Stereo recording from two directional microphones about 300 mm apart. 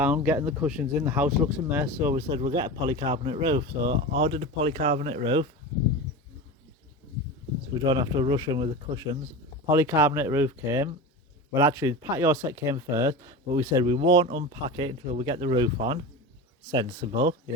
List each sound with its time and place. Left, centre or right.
0.0 s speech: centre
7.9 s speech: centre